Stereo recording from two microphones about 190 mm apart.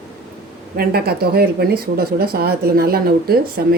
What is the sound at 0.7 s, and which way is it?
Speech, 50° right (ahead or behind).